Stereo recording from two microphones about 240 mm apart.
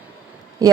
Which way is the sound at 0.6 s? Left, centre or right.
Centre.